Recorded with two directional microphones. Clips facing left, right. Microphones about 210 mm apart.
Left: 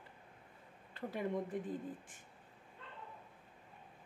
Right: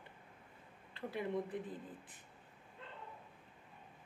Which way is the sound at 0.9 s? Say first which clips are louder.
Left 1 dB; 45° left (ahead or behind).